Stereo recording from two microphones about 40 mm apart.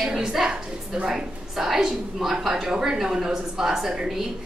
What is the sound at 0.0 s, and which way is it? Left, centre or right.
A woman's voice, centre.